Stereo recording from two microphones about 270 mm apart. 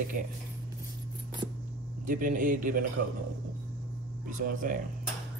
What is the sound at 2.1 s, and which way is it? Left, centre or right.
Speech, right.